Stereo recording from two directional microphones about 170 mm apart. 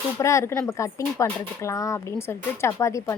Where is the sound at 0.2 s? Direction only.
15° left (ahead or behind).